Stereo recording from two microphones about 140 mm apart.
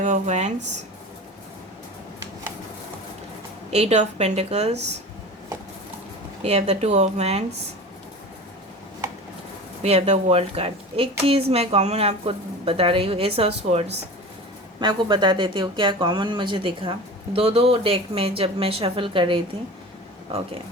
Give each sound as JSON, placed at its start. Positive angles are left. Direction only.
{"t": 0.0, "sound": "speech", "side_deg": -60}
{"t": 3.7, "sound": "speech", "side_deg": -50}
{"t": 6.4, "sound": "speech", "side_deg": -50}
{"t": 9.8, "sound": "speech", "side_deg": -50}
{"t": 14.8, "sound": "speech", "side_deg": -30}